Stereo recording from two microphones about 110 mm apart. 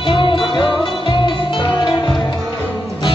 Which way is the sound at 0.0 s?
50° left (ahead or behind).